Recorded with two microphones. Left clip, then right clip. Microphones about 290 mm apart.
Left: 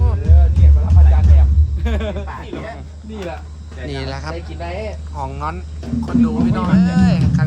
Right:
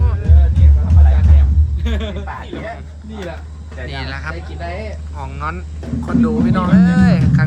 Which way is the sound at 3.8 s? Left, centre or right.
Centre.